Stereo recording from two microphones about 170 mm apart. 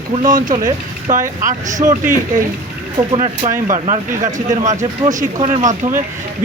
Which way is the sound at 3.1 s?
45° right (ahead or behind).